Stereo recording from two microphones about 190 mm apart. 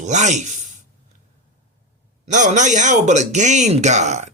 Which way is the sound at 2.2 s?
40° right (ahead or behind).